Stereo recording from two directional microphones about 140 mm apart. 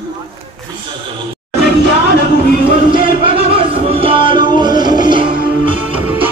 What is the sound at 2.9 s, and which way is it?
Music, 35° right (ahead or behind).